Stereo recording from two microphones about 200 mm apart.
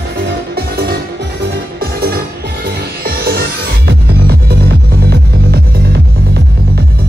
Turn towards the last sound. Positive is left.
turn(degrees=-50)  # may be behind; listen again after turning